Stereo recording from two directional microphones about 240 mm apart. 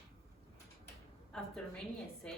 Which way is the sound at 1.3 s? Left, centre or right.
Centre.